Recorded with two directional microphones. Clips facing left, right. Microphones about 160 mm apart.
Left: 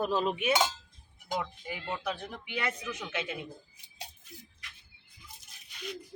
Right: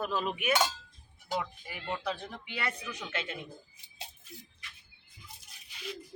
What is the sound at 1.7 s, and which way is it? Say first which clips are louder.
Speech: even; 20° left (ahead or behind).